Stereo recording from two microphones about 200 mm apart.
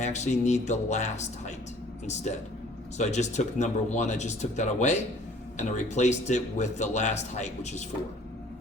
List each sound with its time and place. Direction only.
0.0 s speech: 35° left (ahead or behind)
3.0 s speech: 35° left (ahead or behind)